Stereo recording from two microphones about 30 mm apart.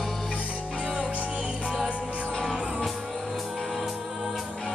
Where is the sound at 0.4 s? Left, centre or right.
Right.